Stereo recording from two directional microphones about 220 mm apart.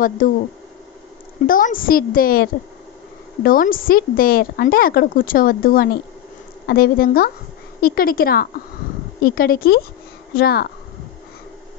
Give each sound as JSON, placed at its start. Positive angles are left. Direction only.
{"t": 0.2, "sound": "a woman's voice", "side_deg": 40}
{"t": 1.5, "sound": "a woman's voice", "side_deg": 40}